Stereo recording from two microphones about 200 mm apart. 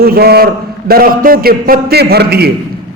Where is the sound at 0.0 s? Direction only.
50° right (ahead or behind).